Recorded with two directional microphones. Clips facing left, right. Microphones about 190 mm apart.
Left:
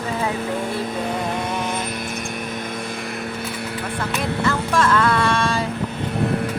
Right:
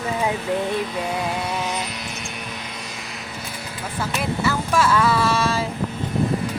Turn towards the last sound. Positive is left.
turn(degrees=-5)  # may be behind; listen again after turning